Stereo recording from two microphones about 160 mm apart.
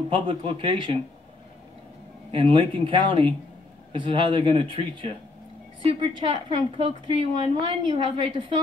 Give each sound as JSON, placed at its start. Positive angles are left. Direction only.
{"t": 0.1, "sound": "a woman's voice", "side_deg": -35}
{"t": 2.3, "sound": "a woman's voice", "side_deg": -35}